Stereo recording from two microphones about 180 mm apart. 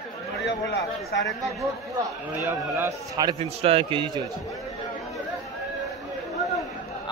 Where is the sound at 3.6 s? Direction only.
35° right (ahead or behind).